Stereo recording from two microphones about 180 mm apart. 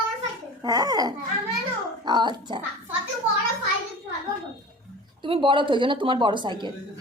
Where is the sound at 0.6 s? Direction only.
20° right (ahead or behind).